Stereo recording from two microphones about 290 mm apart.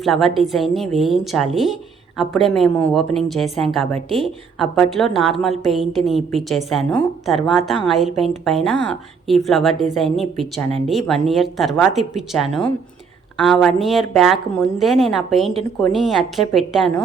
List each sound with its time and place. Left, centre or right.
0.0 s a woman's voice: centre